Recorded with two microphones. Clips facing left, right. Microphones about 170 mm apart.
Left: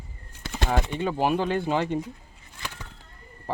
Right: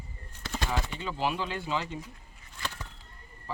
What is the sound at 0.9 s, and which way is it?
Speech, 50° left (ahead or behind).